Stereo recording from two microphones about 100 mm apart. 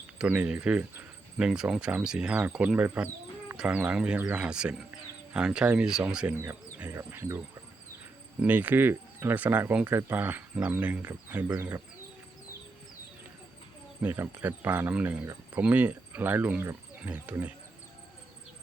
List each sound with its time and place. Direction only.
0.3 s speech: 15° right (ahead or behind)
14.0 s speech: 20° right (ahead or behind)